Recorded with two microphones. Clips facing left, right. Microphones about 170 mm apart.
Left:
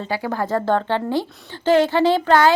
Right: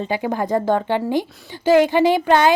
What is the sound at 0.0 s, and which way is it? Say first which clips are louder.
A woman's voice: right 2 dB; 20° right (ahead or behind).